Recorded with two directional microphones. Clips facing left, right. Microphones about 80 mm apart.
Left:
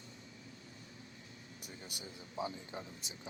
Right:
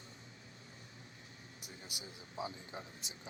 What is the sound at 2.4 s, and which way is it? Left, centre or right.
Speech, centre.